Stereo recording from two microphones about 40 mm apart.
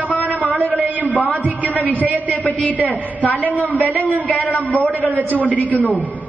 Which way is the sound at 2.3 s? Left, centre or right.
Left.